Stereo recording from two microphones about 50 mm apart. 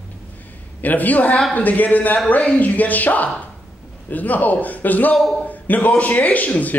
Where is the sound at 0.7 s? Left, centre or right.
Left.